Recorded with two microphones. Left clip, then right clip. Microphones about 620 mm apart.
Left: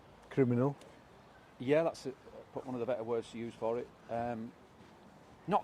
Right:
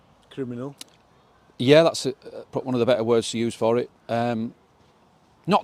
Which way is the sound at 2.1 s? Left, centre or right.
Right.